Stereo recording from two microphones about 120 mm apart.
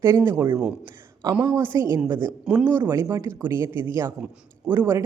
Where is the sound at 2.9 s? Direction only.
25° right (ahead or behind).